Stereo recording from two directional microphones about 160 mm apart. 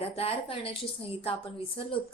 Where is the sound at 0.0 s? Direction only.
35° left (ahead or behind).